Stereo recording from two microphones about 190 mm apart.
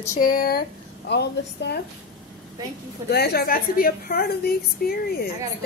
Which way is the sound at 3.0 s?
55° left (ahead or behind).